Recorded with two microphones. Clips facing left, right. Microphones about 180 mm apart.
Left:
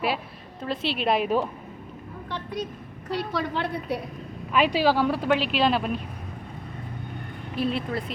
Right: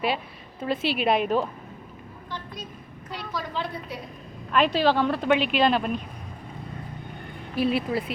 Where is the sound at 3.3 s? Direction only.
65° left (ahead or behind).